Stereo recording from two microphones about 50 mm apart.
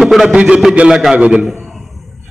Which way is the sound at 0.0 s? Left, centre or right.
Centre.